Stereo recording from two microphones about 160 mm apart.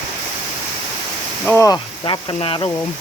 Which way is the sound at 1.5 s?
20° left (ahead or behind).